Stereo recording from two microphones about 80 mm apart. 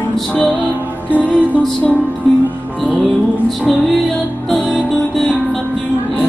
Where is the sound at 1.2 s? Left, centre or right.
Centre.